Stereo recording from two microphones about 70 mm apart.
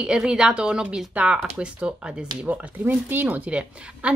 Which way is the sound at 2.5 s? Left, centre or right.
Right.